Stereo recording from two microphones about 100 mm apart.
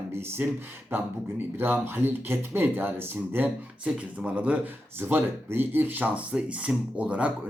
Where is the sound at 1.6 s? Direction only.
20° right (ahead or behind).